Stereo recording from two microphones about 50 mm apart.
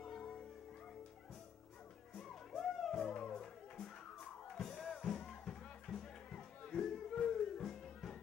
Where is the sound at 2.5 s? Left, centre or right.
Centre.